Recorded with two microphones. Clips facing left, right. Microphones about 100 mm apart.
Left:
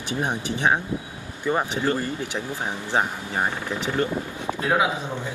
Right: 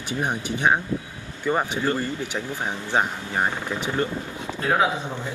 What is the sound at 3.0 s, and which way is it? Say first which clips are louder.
Speech: right 1 dB; 15° left (ahead or behind).